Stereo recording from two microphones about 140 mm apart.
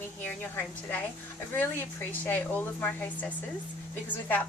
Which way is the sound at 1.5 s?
15° left (ahead or behind).